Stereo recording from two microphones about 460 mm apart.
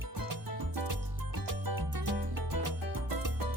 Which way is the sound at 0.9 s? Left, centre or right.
Right.